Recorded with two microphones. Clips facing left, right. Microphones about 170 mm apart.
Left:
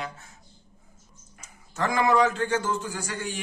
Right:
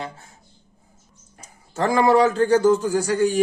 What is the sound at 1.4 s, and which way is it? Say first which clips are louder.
A man's voice: right 5 dB; 30° right (ahead or behind).